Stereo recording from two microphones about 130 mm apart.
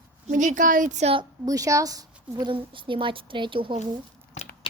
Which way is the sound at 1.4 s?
25° right (ahead or behind).